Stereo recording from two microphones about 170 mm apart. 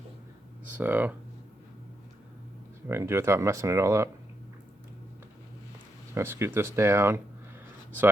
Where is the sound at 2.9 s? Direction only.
15° right (ahead or behind).